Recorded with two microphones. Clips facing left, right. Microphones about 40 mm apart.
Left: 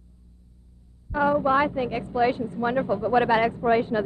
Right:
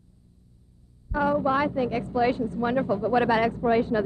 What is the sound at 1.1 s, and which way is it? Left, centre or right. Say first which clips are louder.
A woman's voice: left 2 dB; centre.